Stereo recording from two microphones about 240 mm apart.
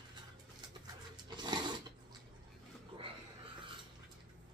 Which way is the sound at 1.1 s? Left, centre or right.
Centre.